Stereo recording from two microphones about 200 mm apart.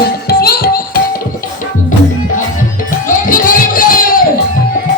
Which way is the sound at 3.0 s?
45° left (ahead or behind).